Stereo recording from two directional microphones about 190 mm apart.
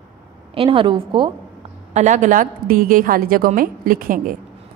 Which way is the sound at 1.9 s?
40° right (ahead or behind).